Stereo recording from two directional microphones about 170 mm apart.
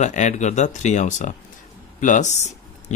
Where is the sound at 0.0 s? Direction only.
45° left (ahead or behind).